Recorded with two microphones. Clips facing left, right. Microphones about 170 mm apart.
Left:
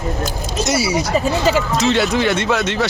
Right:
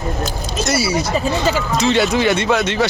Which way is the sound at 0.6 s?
15° left (ahead or behind).